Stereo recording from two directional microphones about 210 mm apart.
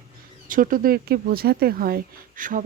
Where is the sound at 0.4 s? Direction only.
40° right (ahead or behind).